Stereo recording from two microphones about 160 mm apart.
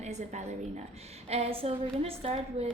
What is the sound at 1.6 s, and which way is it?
A woman's voice, 35° right (ahead or behind).